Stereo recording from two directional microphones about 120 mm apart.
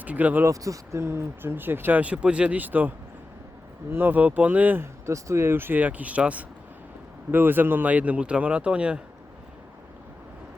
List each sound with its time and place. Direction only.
0.0 s speech: 10° right (ahead or behind)
0.4 s speech: 30° right (ahead or behind)
3.9 s speech: 15° right (ahead or behind)